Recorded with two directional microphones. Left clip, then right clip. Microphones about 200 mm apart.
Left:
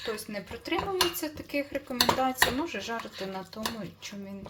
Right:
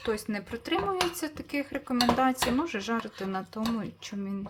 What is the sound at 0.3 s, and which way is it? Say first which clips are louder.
Speech: right 2 dB; 35° right (ahead or behind).